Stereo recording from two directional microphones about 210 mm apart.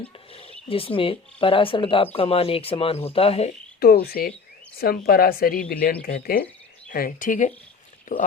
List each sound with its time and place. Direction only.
0.0 s speech: 25° left (ahead or behind)
3.8 s speech: 45° left (ahead or behind)